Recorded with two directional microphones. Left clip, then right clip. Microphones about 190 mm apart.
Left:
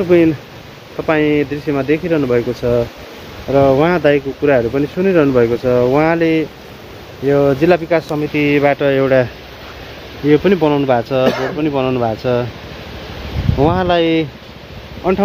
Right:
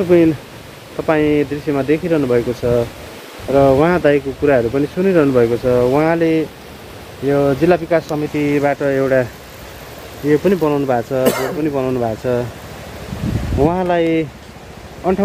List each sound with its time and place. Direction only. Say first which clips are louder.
0.1 s speech: left 1 dB; 5° right (ahead or behind); by 9.3 s 25° left (ahead or behind)
10.3 s speech: left 2 dB; 20° left (ahead or behind)
11.2 s speech: left 1 dB; 20° right (ahead or behind)
11.6 s speech: left 4 dB; 20° left (ahead or behind)
13.6 s speech: left 2 dB; 15° left (ahead or behind)